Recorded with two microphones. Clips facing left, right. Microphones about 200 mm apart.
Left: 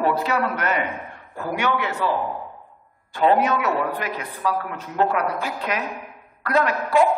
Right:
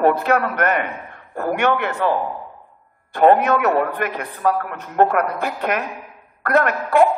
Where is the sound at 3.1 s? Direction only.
55° right (ahead or behind).